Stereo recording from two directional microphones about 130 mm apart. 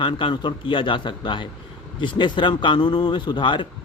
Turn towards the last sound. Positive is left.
turn(degrees=40)  # may be behind; listen again after turning